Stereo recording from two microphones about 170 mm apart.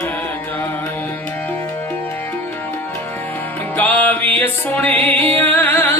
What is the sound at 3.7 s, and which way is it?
Music, 10° left (ahead or behind).